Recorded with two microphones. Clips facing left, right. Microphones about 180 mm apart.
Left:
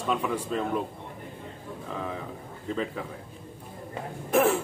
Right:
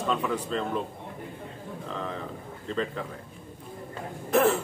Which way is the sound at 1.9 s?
10° left (ahead or behind).